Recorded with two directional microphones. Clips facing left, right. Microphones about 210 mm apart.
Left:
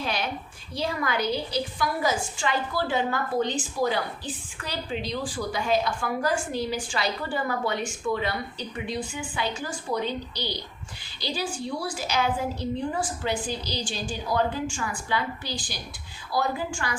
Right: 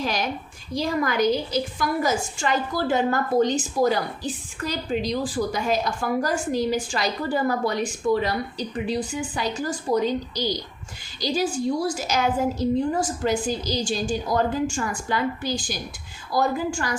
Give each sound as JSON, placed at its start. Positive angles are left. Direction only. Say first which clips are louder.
{"t": 0.0, "sound": "a woman's voice", "louder": "right 3 dB", "side_deg": -40}